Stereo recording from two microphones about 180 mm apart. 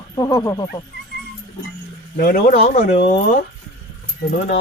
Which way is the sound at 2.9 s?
40° left (ahead or behind).